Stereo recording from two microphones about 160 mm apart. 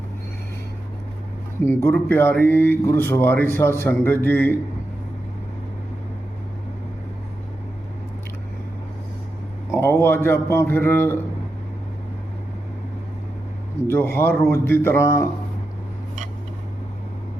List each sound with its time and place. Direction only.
1.6 s speech: 15° left (ahead or behind)
9.7 s speech: 15° left (ahead or behind)
13.8 s speech: 15° left (ahead or behind)